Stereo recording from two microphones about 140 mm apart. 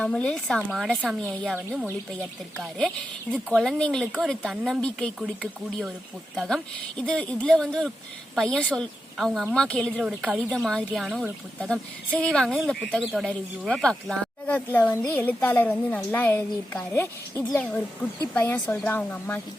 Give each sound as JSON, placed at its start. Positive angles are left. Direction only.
{"t": 0.0, "sound": "a woman's voice", "side_deg": 5}
{"t": 6.3, "sound": "a woman's voice", "side_deg": 0}
{"t": 10.0, "sound": "a woman's voice", "side_deg": -5}